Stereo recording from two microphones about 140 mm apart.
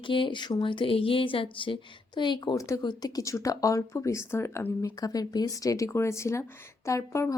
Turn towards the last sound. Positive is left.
turn(degrees=20)  # may be behind; listen again after turning